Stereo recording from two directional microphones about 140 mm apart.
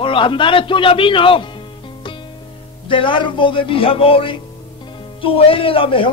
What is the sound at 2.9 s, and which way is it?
A man's voice, 35° left (ahead or behind).